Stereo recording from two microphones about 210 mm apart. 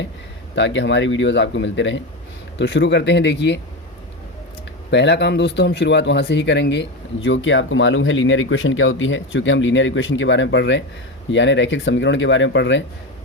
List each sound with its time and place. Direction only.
0.5 s speech: 60° left (ahead or behind)
4.9 s speech: 55° left (ahead or behind)